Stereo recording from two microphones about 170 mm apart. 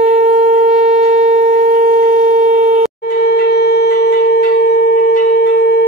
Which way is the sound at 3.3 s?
80° left.